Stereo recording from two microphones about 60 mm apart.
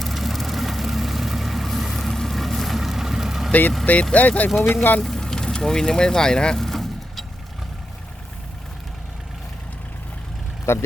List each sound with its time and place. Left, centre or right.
0.0 s vehicle: centre
4.1 s speech: left
4.4 s speech: centre
4.7 s speech: left
5.0 s vehicle: centre
10.7 s speech: left